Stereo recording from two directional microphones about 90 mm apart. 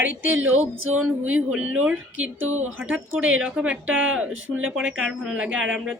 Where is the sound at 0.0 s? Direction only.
20° right (ahead or behind).